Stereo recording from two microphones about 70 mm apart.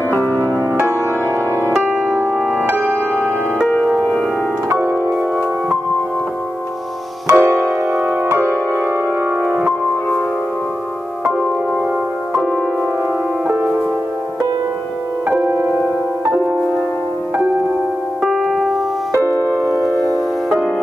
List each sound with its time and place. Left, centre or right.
0.1 s music: left
2.3 s music: centre
4.7 s music: right
7.3 s music: right
9.4 s music: centre
11.2 s music: centre
13.5 s music: right
18.2 s music: centre
19.2 s music: right